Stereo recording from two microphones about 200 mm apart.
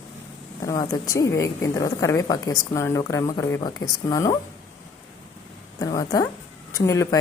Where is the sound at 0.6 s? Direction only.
15° left (ahead or behind).